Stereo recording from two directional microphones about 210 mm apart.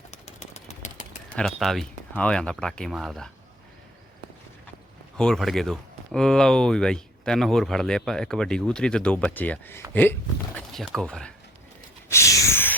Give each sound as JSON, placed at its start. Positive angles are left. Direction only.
{"t": 0.1, "sound": "bird", "side_deg": 30}
{"t": 1.4, "sound": "speech", "side_deg": 0}
{"t": 5.1, "sound": "speech", "side_deg": 5}
{"t": 12.1, "sound": "a sound", "side_deg": 15}